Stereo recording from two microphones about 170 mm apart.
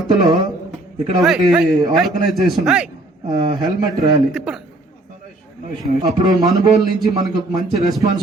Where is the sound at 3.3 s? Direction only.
25° right (ahead or behind).